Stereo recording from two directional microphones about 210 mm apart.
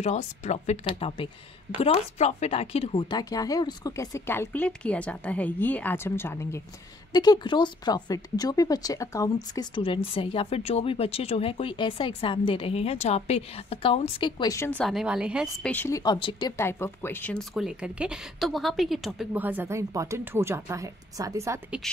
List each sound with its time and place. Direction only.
0.0 s a woman's voice: 35° left (ahead or behind); by 15.7 s 5° right (ahead or behind)
15.7 s speech: 10° left (ahead or behind); by 21.9 s 5° right (ahead or behind)